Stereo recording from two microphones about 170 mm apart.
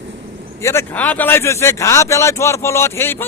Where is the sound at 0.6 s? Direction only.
15° left (ahead or behind).